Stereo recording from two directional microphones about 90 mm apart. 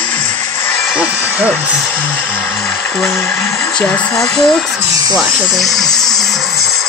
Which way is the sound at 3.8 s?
5° left (ahead or behind).